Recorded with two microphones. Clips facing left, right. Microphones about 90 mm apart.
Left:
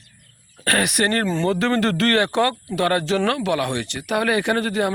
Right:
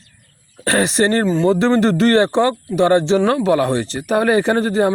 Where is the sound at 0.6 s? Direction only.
25° right (ahead or behind).